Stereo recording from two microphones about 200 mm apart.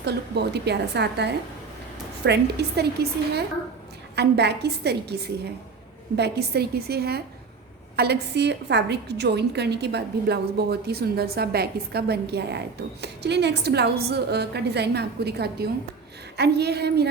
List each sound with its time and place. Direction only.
0.0 s a woman's voice: 55° right (ahead or behind)